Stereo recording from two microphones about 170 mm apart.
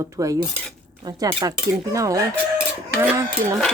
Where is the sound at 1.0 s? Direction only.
20° right (ahead or behind).